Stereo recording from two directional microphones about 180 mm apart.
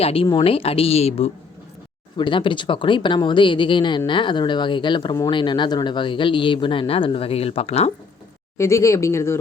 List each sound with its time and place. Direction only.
0.0 s speech: 30° left (ahead or behind)
8.5 s speech: 15° left (ahead or behind)